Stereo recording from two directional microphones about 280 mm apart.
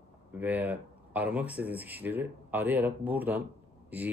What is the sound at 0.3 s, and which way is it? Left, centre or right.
Speech, centre.